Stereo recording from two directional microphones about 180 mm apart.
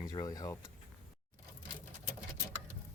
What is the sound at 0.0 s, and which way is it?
Speech, 20° left (ahead or behind).